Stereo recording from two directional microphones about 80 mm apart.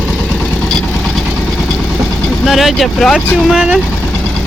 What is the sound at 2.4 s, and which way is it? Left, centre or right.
Speech, centre.